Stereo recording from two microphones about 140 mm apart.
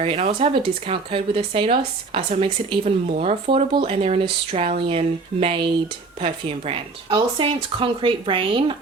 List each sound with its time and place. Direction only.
0.0 s speech: 40° right (ahead or behind)